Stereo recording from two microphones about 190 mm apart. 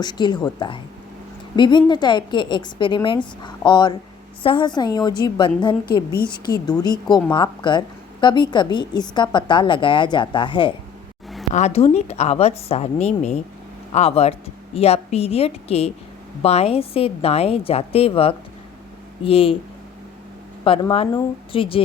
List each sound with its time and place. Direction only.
0.0 s a woman's voice: 25° left (ahead or behind)
20.7 s a woman's voice: 30° left (ahead or behind)